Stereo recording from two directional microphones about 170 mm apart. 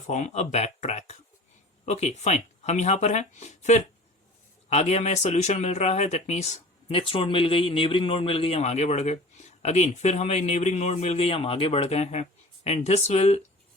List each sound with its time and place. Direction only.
0.1 s speech: 40° left (ahead or behind)